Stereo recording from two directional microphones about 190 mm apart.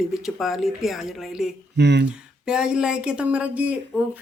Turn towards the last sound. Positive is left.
turn(degrees=-5)  # may be behind; listen again after turning